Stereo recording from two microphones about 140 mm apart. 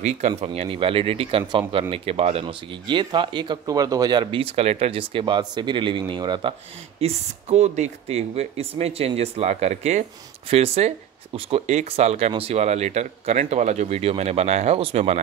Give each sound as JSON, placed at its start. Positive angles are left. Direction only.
{"t": 0.4, "sound": "speech", "side_deg": -45}
{"t": 2.4, "sound": "speech", "side_deg": -35}
{"t": 7.0, "sound": "speech", "side_deg": -50}